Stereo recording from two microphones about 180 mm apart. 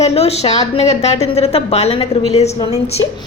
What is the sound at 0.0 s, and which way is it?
A woman's voice, 35° left (ahead or behind).